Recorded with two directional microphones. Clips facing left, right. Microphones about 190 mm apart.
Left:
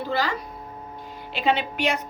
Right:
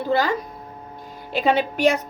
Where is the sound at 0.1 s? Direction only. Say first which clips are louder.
Right 7 dB; 50° right (ahead or behind).